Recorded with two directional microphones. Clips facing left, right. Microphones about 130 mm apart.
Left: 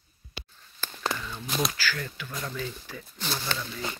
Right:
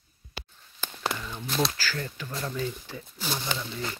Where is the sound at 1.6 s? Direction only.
30° right (ahead or behind).